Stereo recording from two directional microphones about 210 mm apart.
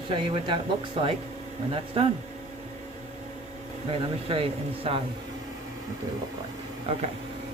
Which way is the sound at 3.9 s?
25° right (ahead or behind).